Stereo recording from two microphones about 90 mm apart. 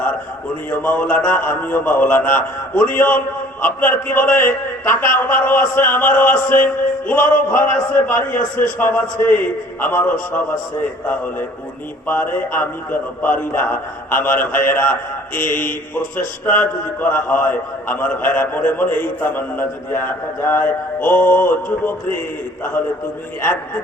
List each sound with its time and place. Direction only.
0.7 s a man's voice: 20° left (ahead or behind)
12.0 s a man's voice: 20° left (ahead or behind)
16.5 s a man's voice: 20° left (ahead or behind)